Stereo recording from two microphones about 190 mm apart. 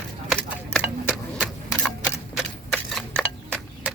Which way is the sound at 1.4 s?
Centre (ahead or behind).